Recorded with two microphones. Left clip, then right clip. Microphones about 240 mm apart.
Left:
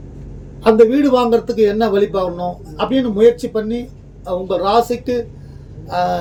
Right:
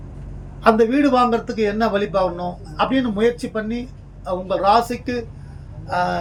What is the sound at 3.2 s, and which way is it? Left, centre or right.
Speech, left.